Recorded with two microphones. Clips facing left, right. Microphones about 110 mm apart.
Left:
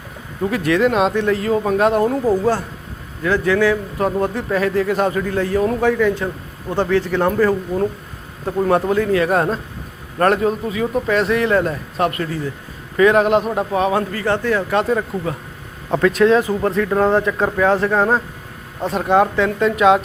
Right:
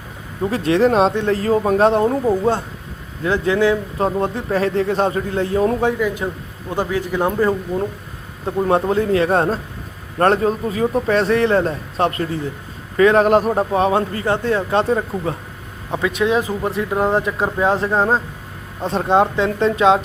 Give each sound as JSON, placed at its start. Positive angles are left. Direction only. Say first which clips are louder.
{"t": 0.5, "sound": "speech", "louder": "right 1 dB", "side_deg": -30}
{"t": 6.0, "sound": "a man's voice", "louder": "left 3 dB", "side_deg": -10}
{"t": 8.6, "sound": "speech", "louder": "even", "side_deg": -25}
{"t": 15.9, "sound": "speech", "louder": "left 5 dB", "side_deg": -5}
{"t": 16.3, "sound": "a man's voice", "louder": "left 3 dB", "side_deg": -15}